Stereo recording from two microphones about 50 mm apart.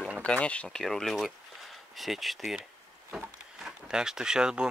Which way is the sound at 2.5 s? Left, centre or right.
Centre.